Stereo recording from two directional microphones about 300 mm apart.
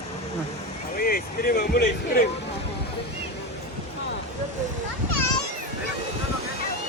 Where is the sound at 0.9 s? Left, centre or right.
Left.